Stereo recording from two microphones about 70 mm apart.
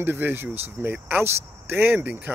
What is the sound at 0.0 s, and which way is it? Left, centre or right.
Speech, right.